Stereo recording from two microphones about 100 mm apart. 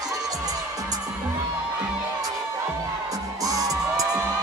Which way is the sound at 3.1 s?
35° right (ahead or behind).